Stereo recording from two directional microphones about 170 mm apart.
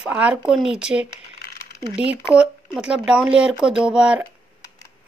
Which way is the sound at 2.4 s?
5° right (ahead or behind).